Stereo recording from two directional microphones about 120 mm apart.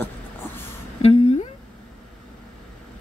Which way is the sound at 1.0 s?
60° left (ahead or behind).